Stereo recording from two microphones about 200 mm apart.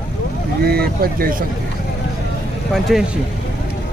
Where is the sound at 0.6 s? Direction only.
50° right (ahead or behind).